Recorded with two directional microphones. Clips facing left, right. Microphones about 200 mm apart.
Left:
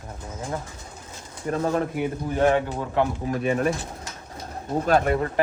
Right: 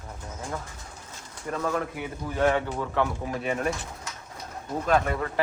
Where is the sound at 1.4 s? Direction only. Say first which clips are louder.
Left 5 dB; 30° left (ahead or behind).